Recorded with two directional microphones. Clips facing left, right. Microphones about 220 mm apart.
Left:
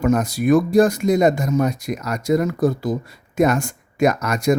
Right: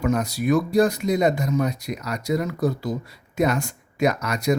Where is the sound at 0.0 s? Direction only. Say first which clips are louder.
Left 4 dB; 50° left (ahead or behind).